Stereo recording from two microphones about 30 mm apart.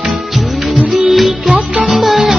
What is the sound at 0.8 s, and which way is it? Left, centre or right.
Music, centre.